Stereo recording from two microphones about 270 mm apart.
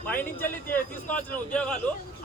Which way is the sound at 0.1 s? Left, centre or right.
Centre.